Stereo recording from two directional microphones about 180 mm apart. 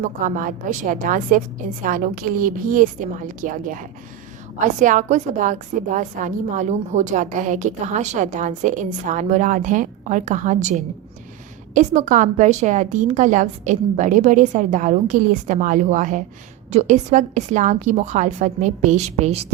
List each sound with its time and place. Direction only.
0.0 s a woman's voice: 45° right (ahead or behind)